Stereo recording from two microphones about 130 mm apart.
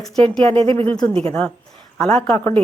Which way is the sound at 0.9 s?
5° left (ahead or behind).